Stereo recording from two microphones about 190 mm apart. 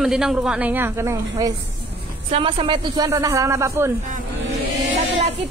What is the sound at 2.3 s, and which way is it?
Speech, 25° right (ahead or behind).